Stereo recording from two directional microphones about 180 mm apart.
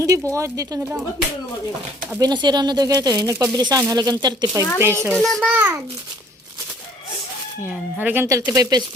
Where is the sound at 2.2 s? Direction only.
25° right (ahead or behind).